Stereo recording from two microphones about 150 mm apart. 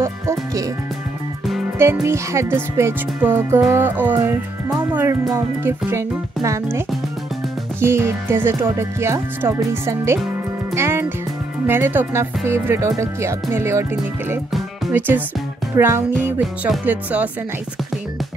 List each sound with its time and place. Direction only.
0.0 s music: 20° right (ahead or behind)
1.8 s speech: 15° right (ahead or behind)
7.8 s speech: 15° right (ahead or behind)
10.7 s music: 15° right (ahead or behind)
11.6 s speech: 15° right (ahead or behind)
14.9 s speech: 10° right (ahead or behind)
15.7 s music: 20° right (ahead or behind)
16.2 s speech: 10° right (ahead or behind)